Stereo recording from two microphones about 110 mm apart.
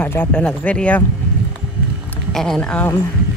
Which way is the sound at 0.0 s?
15° left (ahead or behind).